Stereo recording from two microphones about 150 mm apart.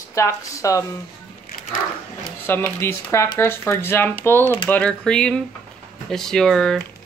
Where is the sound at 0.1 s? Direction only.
20° left (ahead or behind).